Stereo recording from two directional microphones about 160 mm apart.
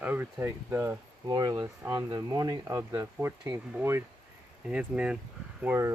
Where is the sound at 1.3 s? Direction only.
25° right (ahead or behind).